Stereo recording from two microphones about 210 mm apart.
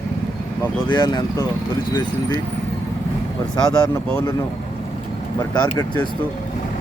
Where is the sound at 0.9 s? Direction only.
20° left (ahead or behind).